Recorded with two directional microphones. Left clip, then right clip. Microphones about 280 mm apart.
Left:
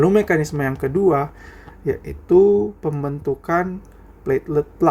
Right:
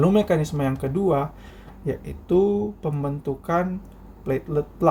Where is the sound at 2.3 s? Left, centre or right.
Left.